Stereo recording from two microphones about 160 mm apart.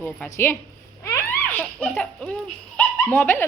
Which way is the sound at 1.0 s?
15° left (ahead or behind).